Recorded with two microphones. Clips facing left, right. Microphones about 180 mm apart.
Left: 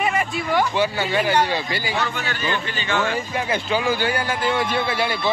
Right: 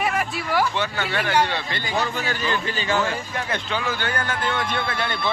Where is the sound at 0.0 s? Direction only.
Centre (ahead or behind).